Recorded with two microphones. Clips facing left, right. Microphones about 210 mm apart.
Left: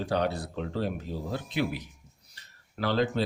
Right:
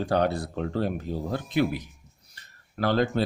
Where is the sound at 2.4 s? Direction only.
50° right (ahead or behind).